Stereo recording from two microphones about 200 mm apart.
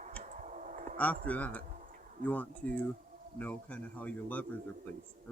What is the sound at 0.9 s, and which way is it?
Speech, 5° left (ahead or behind).